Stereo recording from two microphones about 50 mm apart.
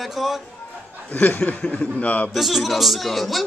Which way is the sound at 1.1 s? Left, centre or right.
Left.